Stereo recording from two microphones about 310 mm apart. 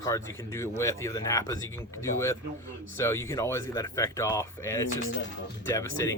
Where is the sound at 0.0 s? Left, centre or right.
Centre.